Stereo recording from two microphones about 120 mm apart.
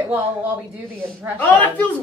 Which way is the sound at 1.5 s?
15° left (ahead or behind).